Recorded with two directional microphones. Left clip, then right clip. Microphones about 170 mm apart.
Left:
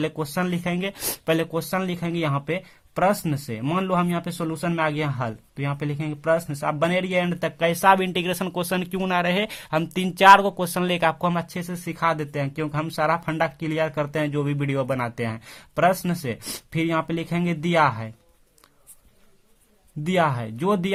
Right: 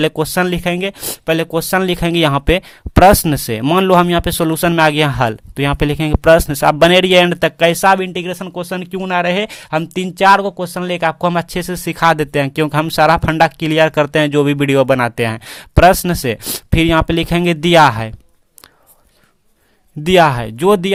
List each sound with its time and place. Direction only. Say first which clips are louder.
0.0 s speech: right 11 dB; 40° right (ahead or behind)
1.5 s speech: right 11 dB; 45° right (ahead or behind)
7.9 s speech: right 4 dB; 20° right (ahead or behind); by 18.1 s 45° right (ahead or behind)
20.1 s speech: right 12 dB; 45° right (ahead or behind)